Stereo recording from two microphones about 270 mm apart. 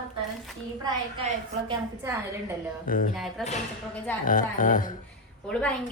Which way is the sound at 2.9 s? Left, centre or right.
Left.